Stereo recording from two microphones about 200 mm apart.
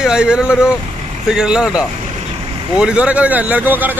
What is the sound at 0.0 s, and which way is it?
Speech, 5° right (ahead or behind).